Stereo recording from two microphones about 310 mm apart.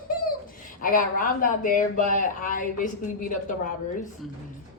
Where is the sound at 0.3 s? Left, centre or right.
Left.